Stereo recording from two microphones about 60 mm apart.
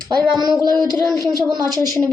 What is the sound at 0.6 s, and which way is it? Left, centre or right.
Speech, right.